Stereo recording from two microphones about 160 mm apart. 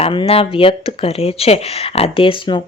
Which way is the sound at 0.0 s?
35° left (ahead or behind).